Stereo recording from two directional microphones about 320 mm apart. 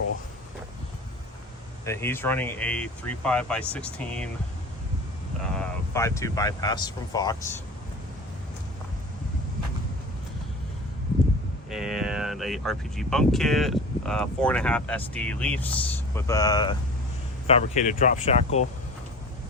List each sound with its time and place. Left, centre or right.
1.8 s speech: centre
5.5 s speech: centre
11.7 s speech: centre; by 18.3 s left